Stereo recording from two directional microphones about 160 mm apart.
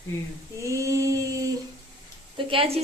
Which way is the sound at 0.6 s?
20° right (ahead or behind).